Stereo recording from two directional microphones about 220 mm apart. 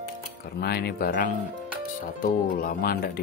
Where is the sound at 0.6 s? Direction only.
45° left (ahead or behind).